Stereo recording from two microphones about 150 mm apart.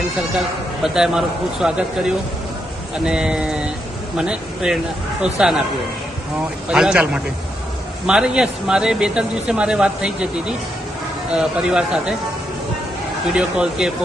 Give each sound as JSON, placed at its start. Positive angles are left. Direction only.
{"t": 0.8, "sound": "speech", "side_deg": -5}
{"t": 6.7, "sound": "a man's voice", "side_deg": -5}
{"t": 13.2, "sound": "speech", "side_deg": -5}